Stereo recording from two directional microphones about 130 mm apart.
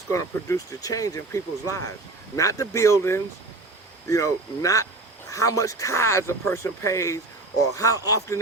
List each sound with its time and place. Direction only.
0.1 s speech: 25° left (ahead or behind)